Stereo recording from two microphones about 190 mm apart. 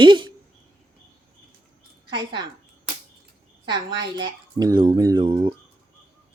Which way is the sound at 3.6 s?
20° right (ahead or behind).